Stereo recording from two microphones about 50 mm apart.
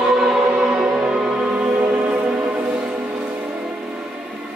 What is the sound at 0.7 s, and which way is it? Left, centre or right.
Music, centre.